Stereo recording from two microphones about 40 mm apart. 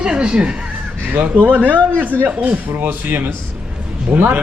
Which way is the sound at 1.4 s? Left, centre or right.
Right.